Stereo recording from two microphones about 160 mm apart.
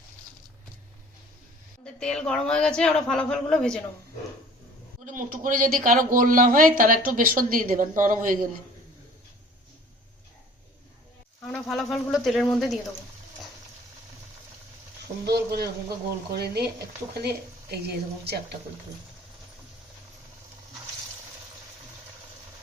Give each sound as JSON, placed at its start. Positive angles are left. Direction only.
{"t": 1.8, "sound": "a woman's voice", "side_deg": 5}
{"t": 5.0, "sound": "speech", "side_deg": -55}
{"t": 11.4, "sound": "a woman's voice", "side_deg": 0}
{"t": 15.3, "sound": "a woman's voice", "side_deg": -90}